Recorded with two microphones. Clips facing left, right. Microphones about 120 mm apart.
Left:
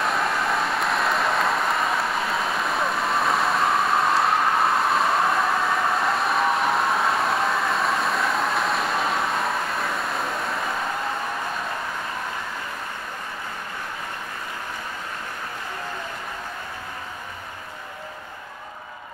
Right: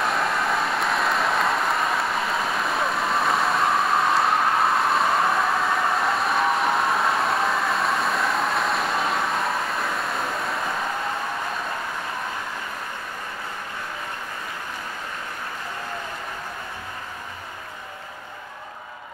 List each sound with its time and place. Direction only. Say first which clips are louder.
0.0 s applause: even; centre (ahead or behind)